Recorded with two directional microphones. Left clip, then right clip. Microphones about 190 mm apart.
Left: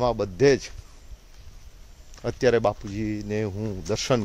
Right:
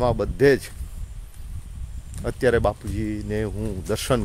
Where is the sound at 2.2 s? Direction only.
10° left (ahead or behind).